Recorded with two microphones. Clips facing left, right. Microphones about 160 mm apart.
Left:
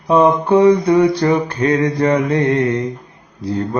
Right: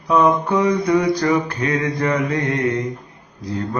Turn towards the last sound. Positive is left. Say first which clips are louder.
# left 5 dB
turn(degrees=30)  # may be behind; listen again after turning